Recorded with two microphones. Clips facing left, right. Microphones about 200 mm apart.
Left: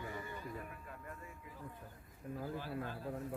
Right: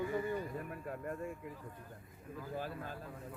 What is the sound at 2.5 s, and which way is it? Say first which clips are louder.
Speech: right 5 dB; 45° right (ahead or behind).